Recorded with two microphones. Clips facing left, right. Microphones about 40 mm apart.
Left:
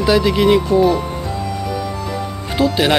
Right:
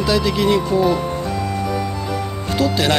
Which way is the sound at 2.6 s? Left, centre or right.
Centre.